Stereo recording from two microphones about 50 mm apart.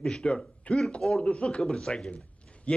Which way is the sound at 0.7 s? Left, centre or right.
Left.